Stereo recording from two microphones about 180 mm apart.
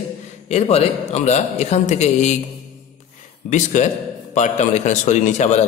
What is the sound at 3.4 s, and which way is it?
A man's voice, 40° left (ahead or behind).